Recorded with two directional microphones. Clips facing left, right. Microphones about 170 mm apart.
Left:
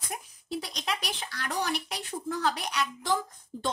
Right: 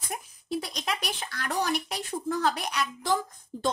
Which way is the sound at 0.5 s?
50° right (ahead or behind).